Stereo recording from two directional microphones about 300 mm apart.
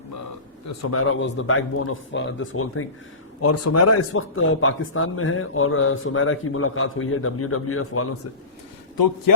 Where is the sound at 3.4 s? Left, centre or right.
Left.